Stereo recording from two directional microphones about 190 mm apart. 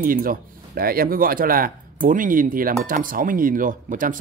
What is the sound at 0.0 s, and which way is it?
Speech, 50° right (ahead or behind).